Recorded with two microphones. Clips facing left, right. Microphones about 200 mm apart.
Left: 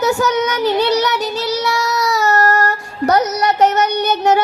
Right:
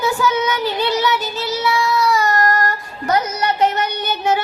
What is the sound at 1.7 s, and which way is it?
Child singing, 70° left (ahead or behind).